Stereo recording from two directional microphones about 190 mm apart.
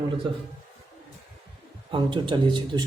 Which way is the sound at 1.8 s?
25° right (ahead or behind).